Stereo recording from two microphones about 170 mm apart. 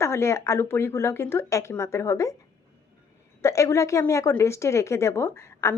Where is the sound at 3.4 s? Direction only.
15° left (ahead or behind).